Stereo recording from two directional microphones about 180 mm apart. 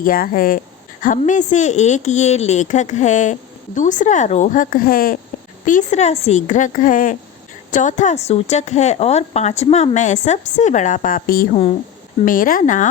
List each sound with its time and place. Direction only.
0.0 s speech: 50° left (ahead or behind)